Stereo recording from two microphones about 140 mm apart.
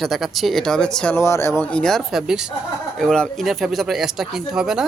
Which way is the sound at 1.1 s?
20° left (ahead or behind).